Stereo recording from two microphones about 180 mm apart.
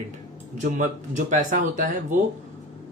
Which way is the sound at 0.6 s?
45° right (ahead or behind).